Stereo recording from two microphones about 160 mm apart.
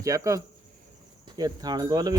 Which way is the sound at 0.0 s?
20° right (ahead or behind).